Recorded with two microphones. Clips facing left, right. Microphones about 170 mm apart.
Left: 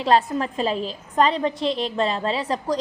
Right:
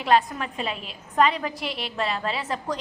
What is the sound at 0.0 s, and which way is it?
A woman's voice, 35° left (ahead or behind).